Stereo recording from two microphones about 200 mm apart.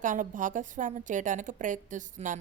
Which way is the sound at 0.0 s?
40° right (ahead or behind).